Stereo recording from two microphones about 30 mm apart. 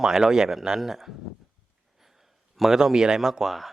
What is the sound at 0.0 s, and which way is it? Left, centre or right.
Speech, centre.